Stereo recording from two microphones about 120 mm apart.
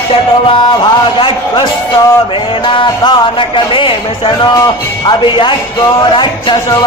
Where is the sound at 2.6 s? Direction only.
45° left (ahead or behind).